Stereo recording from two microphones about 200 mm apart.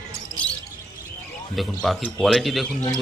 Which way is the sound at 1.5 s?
Centre (ahead or behind).